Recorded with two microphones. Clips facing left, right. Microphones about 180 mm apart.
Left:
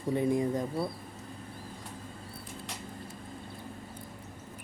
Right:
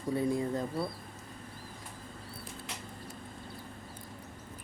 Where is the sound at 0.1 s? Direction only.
20° left (ahead or behind).